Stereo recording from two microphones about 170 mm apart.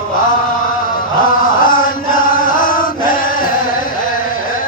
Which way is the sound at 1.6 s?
55° left (ahead or behind).